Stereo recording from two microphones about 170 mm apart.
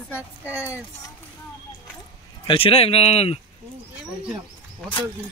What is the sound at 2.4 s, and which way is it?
Speech, 35° left (ahead or behind).